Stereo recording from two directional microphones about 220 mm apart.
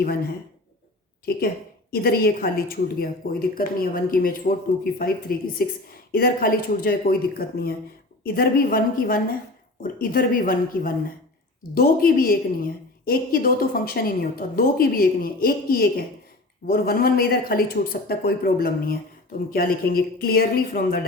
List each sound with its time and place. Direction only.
1.9 s a woman's voice: 45° left (ahead or behind)